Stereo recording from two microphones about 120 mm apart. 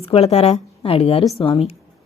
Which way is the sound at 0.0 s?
60° left (ahead or behind).